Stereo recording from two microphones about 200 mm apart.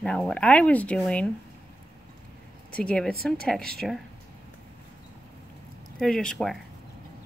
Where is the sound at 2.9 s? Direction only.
Centre (ahead or behind).